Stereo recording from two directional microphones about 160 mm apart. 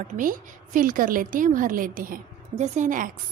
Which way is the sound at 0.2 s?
55° right (ahead or behind).